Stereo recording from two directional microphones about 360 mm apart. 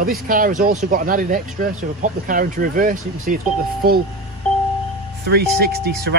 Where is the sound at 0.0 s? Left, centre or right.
Right.